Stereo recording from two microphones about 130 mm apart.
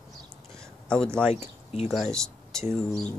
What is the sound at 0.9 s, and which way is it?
Speech, 5° left (ahead or behind).